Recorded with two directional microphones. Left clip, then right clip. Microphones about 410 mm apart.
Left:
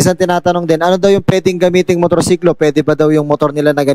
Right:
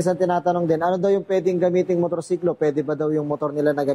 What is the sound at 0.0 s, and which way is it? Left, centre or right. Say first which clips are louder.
Speech: left 8 dB; left.